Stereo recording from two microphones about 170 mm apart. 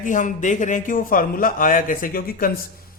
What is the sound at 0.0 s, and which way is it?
A man's voice, 50° left (ahead or behind).